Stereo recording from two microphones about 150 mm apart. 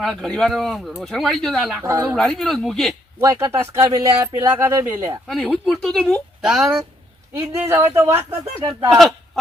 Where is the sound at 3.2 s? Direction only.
20° right (ahead or behind).